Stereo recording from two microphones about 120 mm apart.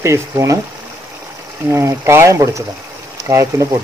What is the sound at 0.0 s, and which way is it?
Speech, 25° right (ahead or behind).